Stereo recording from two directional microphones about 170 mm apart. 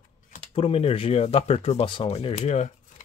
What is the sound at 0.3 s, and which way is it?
Speech, 35° left (ahead or behind).